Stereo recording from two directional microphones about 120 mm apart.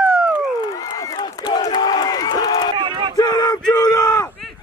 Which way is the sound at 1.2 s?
40° left (ahead or behind).